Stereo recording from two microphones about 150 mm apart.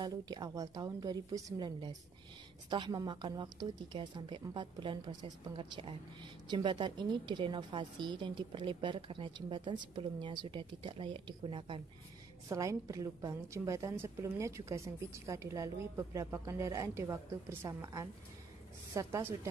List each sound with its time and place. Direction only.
0.0 s a woman's voice: 25° right (ahead or behind)
12.4 s a woman's voice: 20° right (ahead or behind)